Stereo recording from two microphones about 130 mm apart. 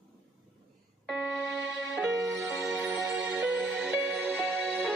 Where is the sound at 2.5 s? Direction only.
5° right (ahead or behind).